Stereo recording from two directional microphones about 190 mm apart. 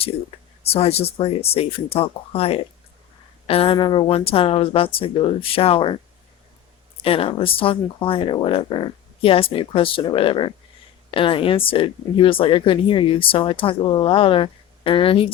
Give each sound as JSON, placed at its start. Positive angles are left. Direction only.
{"t": 0.7, "sound": "speech", "side_deg": 30}
{"t": 7.0, "sound": "speech", "side_deg": 30}